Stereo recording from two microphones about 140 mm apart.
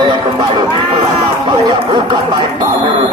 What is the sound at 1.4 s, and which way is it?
Speech, 35° right (ahead or behind).